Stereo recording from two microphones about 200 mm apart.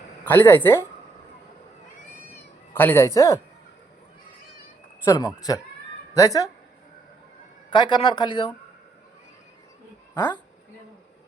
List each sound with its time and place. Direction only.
0.3 s speech: 10° left (ahead or behind)
2.3 s cat: 10° left (ahead or behind)
5.0 s speech: 20° left (ahead or behind)
7.7 s speech: 20° left (ahead or behind)